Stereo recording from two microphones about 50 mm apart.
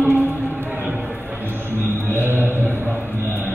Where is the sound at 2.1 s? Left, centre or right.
Right.